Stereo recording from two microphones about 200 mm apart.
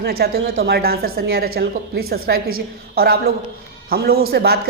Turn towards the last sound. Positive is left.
turn(degrees=-50)  # may be behind; listen again after turning